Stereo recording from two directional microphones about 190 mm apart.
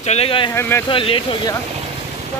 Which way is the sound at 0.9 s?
25° left (ahead or behind).